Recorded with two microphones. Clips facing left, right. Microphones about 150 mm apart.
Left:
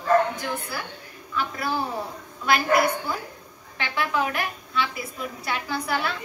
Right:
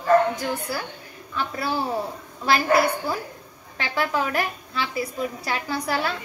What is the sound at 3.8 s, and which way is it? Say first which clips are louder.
Speech: right 2 dB; 35° right (ahead or behind).